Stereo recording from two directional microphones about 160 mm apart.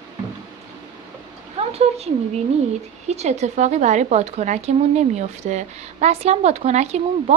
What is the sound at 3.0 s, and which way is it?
Speech, 45° right (ahead or behind).